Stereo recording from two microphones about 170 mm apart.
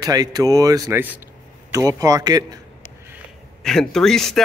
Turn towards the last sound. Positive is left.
turn(degrees=5)  # may be behind; listen again after turning